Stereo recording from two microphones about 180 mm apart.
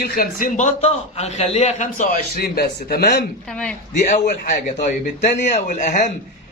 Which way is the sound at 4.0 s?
40° left (ahead or behind).